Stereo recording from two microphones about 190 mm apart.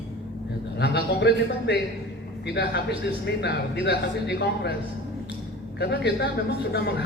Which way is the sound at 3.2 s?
60° left (ahead or behind).